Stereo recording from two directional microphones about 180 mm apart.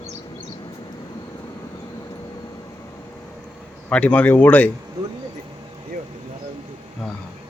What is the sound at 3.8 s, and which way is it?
Speech, 10° left (ahead or behind).